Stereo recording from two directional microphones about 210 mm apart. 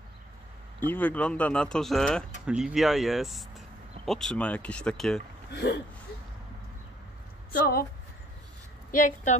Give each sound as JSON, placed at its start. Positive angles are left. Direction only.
{"t": 0.7, "sound": "speech", "side_deg": 10}
{"t": 5.5, "sound": "speech", "side_deg": 55}
{"t": 8.9, "sound": "speech", "side_deg": 35}